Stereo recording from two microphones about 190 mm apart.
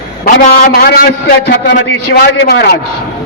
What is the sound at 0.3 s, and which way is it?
Speech, 50° left (ahead or behind).